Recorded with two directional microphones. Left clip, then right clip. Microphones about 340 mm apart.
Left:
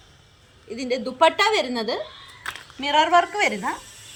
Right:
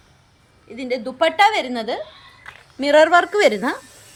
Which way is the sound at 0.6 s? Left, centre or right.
Centre.